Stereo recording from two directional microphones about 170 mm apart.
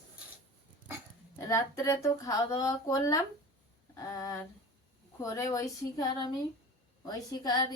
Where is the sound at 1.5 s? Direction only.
15° left (ahead or behind).